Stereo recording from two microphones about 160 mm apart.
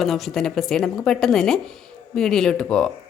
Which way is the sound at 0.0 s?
Centre (ahead or behind).